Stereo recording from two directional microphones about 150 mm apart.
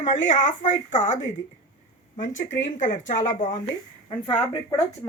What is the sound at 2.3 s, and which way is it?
A woman's voice, 55° left (ahead or behind).